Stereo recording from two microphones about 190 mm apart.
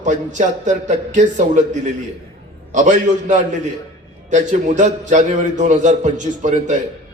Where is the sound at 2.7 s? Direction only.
40° right (ahead or behind).